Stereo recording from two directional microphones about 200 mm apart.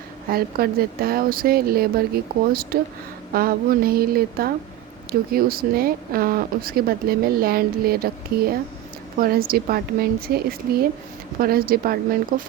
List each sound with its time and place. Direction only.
0.3 s speech: 50° right (ahead or behind)